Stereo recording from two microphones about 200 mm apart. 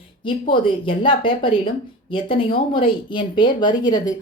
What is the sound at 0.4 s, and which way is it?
Speech, 25° left (ahead or behind).